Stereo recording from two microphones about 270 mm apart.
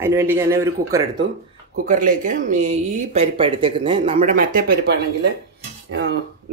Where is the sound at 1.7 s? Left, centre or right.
Right.